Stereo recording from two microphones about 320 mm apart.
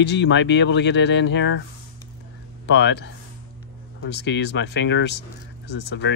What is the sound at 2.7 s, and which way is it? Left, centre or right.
Speech, left.